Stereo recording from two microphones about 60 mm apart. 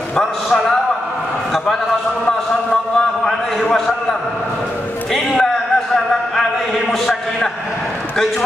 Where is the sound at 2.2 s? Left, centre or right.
Centre.